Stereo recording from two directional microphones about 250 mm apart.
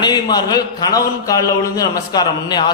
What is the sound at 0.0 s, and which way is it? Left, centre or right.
A man's voice, centre.